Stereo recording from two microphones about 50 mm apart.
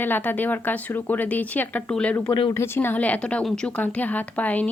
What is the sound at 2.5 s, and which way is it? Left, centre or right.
Speech, left.